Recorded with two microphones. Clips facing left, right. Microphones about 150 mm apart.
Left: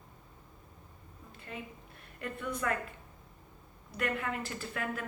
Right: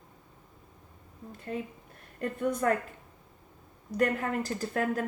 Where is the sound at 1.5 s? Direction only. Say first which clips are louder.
Right 8 dB; 40° right (ahead or behind).